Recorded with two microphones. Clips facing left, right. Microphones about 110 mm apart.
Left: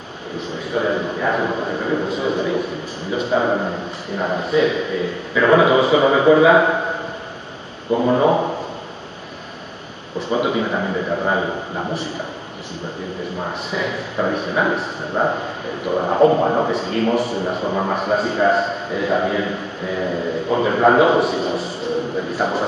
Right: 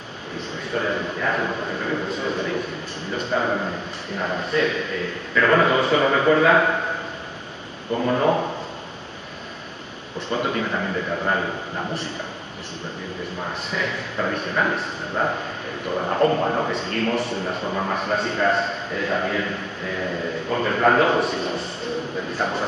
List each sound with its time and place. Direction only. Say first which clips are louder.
0.7 s a man's voice: left 4 dB; 15° left (ahead or behind)
2.0 s a man's voice: left 5 dB; 5° left (ahead or behind)
3.4 s a man's voice: left 4 dB; 15° left (ahead or behind)
7.9 s a man's voice: left 5 dB; 15° left (ahead or behind)
10.1 s a man's voice: left 5 dB; 10° left (ahead or behind)
13.7 s a man's voice: left 3 dB; 5° left (ahead or behind)
16.7 s a man's voice: left 5 dB; 5° left (ahead or behind)
17.6 s a man's voice: left 4 dB; 15° left (ahead or behind)
17.9 s a man's voice: left 5 dB; 5° left (ahead or behind)